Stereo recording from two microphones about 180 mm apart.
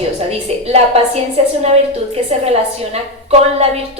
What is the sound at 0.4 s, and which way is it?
A woman's voice, 35° right (ahead or behind).